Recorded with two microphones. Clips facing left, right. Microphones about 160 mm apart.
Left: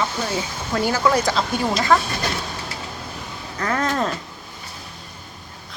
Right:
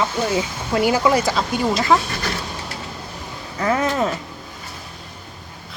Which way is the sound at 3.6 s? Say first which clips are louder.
Right 3 dB; 5° right (ahead or behind).